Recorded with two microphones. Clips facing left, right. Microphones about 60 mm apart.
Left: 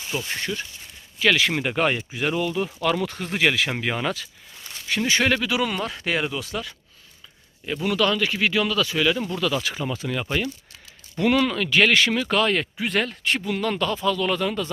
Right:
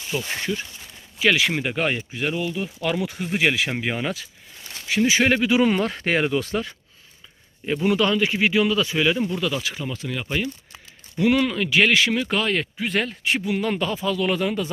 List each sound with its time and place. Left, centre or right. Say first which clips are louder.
0.2 s speech: right 2 dB; centre
5.4 s speech: right 5 dB; right
7.6 s speech: right 2 dB; right
9.6 s speech: left 2 dB; centre